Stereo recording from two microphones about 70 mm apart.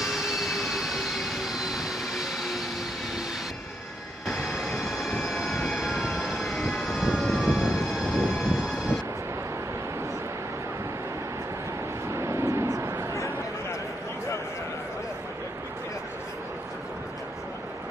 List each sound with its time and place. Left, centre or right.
0.0 s vehicle: centre
4.3 s vehicle: centre
7.4 s train: centre
12.1 s vehicle: right